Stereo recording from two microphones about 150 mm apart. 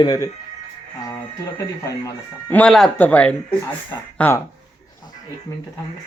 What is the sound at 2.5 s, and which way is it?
Speech, 5° left (ahead or behind).